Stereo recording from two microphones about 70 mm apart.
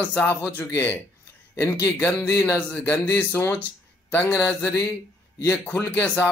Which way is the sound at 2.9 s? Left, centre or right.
Left.